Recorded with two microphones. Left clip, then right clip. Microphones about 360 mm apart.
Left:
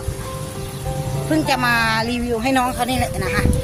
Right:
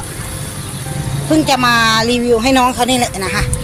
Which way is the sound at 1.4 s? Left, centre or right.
Left.